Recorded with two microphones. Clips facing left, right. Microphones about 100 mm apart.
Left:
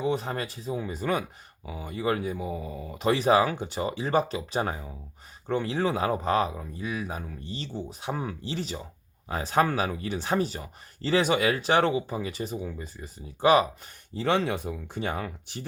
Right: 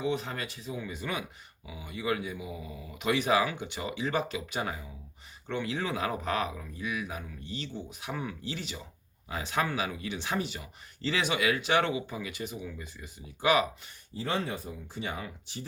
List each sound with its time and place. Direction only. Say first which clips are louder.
0.0 s speech: left 4 dB; 35° left (ahead or behind)
14.2 s speech: left 7 dB; 70° left (ahead or behind); by 15.6 s 55° left (ahead or behind)